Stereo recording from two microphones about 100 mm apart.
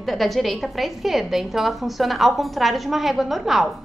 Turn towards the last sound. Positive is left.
turn(degrees=0)  # may be behind; listen again after turning